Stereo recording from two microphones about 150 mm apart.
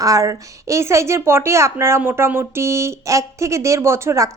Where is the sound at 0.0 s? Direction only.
20° right (ahead or behind).